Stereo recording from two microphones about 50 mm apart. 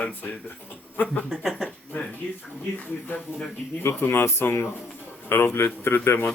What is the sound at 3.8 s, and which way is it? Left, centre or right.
A man's voice, left.